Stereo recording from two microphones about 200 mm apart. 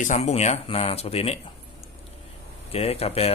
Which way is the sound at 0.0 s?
35° left (ahead or behind).